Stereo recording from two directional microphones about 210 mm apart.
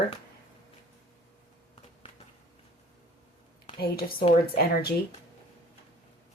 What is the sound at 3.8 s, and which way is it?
Speech, 45° left (ahead or behind).